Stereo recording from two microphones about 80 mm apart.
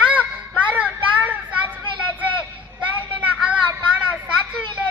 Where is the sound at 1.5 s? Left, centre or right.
Centre.